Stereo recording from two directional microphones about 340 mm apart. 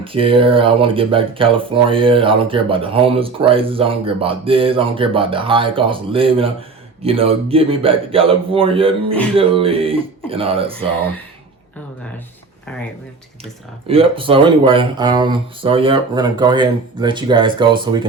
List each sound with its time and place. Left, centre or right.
0.0 s speech: centre
13.4 s speech: centre